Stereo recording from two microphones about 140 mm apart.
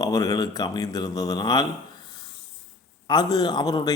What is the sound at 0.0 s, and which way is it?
Speech, 25° left (ahead or behind).